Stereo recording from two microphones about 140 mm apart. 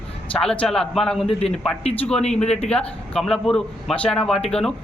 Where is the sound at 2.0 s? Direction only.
5° left (ahead or behind).